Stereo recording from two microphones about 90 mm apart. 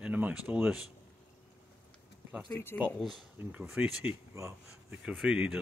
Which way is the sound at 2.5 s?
25° left (ahead or behind).